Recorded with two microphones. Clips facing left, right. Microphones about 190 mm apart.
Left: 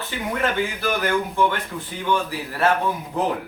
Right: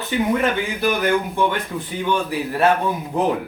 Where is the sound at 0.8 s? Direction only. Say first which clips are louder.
Right 6 dB; 15° right (ahead or behind).